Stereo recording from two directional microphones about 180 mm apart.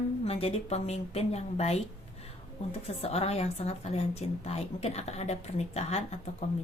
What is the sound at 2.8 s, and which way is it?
A woman's voice, 35° left (ahead or behind).